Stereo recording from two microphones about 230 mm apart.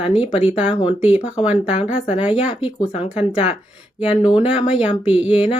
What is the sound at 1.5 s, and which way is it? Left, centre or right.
Speech, left.